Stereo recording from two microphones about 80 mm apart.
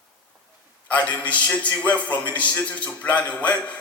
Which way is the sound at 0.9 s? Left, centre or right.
Centre.